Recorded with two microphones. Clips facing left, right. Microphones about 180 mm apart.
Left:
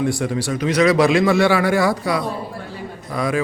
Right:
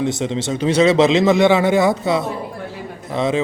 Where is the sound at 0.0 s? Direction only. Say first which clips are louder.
Even; 20° right (ahead or behind).